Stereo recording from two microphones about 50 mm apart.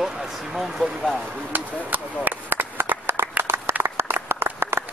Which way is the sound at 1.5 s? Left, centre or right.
Right.